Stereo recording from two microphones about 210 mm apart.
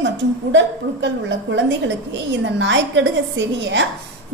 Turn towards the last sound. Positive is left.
turn(degrees=-60)  # may be behind; listen again after turning